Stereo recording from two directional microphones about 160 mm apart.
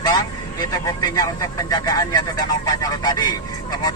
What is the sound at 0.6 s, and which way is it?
Speech, 25° left (ahead or behind).